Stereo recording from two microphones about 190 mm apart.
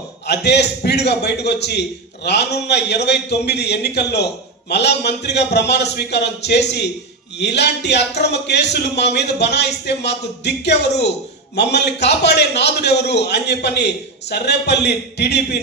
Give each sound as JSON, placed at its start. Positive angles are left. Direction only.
{"t": 0.3, "sound": "a man's voice", "side_deg": 60}